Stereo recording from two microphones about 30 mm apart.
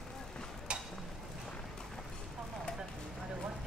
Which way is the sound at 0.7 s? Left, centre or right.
Right.